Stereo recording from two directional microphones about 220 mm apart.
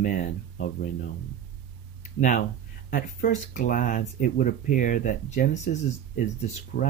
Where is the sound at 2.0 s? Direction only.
35° left (ahead or behind).